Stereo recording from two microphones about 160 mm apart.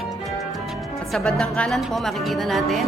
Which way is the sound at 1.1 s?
5° left (ahead or behind).